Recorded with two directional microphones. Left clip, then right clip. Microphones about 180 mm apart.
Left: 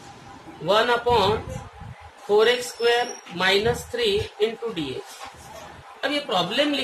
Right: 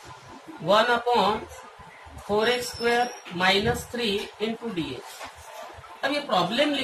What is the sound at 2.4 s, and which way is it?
Speech, 40° left (ahead or behind).